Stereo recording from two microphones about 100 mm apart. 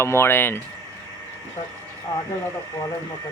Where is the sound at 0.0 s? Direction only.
25° left (ahead or behind).